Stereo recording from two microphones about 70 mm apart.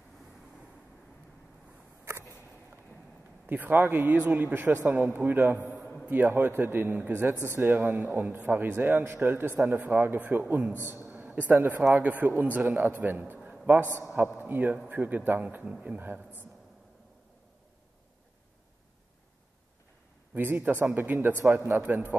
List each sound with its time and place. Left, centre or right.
3.4 s speech: right
10.9 s a sound: right
11.9 s speech: right
20.3 s speech: right